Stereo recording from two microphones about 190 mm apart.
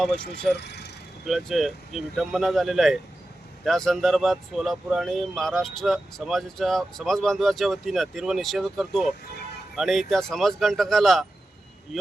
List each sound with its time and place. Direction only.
0.5 s speech: 60° left (ahead or behind)
1.2 s speech: centre (ahead or behind)